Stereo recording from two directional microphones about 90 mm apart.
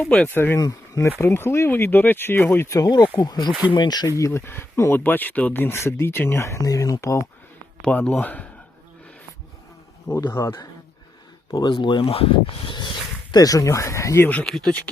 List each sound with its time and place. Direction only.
0.0 s speech: 5° left (ahead or behind)
0.3 s speech: 25° left (ahead or behind)
0.6 s speech: 35° left (ahead or behind)
2.7 s speech: 45° left (ahead or behind)
4.2 s speech: 30° left (ahead or behind)
7.8 s speech: 15° left (ahead or behind)
10.1 s speech: 40° left (ahead or behind)
11.7 s speech: 65° left (ahead or behind)
13.3 s speech: 40° left (ahead or behind)
14.4 s speech: 5° left (ahead or behind)